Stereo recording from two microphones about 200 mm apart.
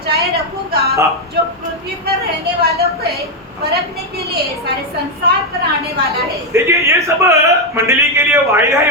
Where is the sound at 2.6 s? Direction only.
50° right (ahead or behind).